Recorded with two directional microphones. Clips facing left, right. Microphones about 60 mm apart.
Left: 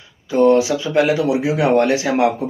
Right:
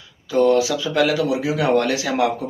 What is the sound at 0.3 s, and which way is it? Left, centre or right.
Speech, left.